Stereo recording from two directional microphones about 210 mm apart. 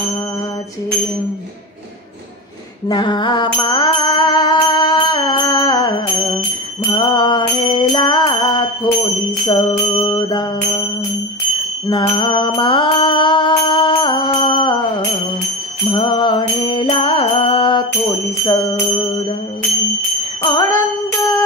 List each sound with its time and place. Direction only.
2.9 s music: 20° left (ahead or behind)
11.9 s mantra: 25° left (ahead or behind)
15.9 s music: 20° left (ahead or behind)
20.4 s jingle bell: 15° left (ahead or behind)